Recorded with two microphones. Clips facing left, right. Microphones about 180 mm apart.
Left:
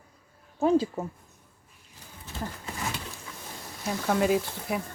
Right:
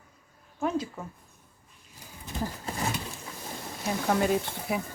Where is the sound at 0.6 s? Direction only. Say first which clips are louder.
Left 7 dB; 30° left (ahead or behind).